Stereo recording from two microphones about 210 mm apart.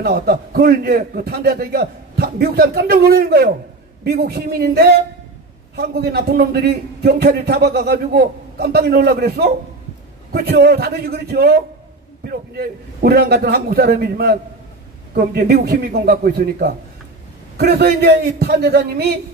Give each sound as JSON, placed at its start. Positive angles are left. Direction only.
{"t": 0.0, "sound": "a man's voice", "side_deg": -50}